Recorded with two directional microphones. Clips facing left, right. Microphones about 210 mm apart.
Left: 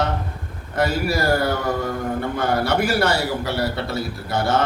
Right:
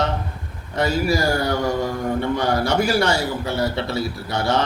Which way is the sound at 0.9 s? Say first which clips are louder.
Right 2 dB; 55° left (ahead or behind).